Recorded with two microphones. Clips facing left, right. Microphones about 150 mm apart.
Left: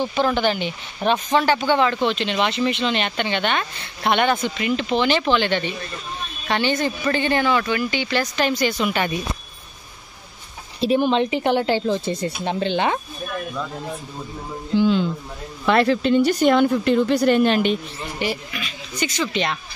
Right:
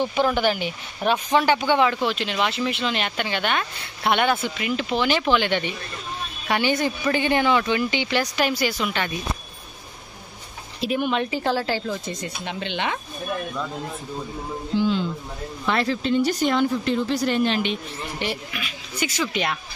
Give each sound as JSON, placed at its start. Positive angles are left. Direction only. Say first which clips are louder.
{"t": 0.0, "sound": "speech", "louder": "left 1 dB", "side_deg": -15}
{"t": 10.8, "sound": "speech", "louder": "left 5 dB", "side_deg": 30}
{"t": 15.6, "sound": "speech", "louder": "left 6 dB", "side_deg": 60}
{"t": 18.2, "sound": "speech", "louder": "left 4 dB", "side_deg": 0}